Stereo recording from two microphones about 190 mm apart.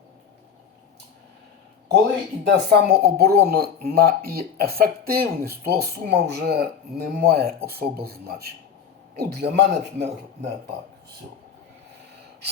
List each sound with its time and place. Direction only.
2.4 s speech: 60° right (ahead or behind)